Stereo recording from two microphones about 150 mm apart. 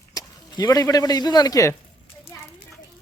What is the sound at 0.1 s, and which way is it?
Speech, 25° left (ahead or behind).